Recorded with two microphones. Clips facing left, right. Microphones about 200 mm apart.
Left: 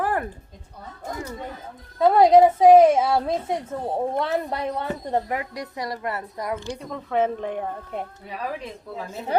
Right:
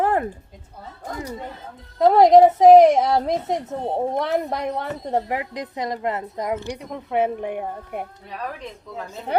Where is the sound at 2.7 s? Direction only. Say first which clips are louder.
Right 2 dB; 20° right (ahead or behind).